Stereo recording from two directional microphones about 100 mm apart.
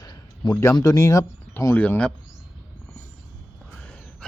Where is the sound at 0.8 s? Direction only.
35° left (ahead or behind).